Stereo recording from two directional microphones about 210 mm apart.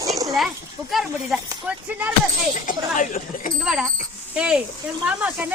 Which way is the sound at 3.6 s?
5° right (ahead or behind).